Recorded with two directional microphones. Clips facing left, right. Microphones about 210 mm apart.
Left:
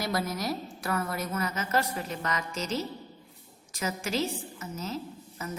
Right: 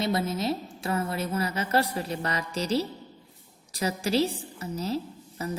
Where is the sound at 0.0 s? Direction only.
25° right (ahead or behind).